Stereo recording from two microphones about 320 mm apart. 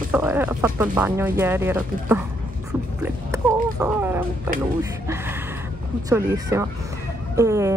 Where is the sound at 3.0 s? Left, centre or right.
Centre.